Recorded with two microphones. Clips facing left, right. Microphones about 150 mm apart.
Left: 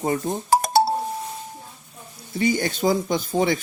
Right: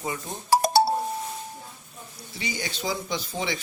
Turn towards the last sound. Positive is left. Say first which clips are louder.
# left 9 dB
turn(degrees=50)  # may be behind; listen again after turning